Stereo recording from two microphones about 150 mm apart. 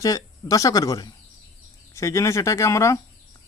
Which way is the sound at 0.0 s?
20° left (ahead or behind).